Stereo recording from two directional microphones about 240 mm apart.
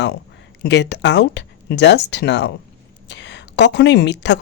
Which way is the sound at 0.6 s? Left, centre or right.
Left.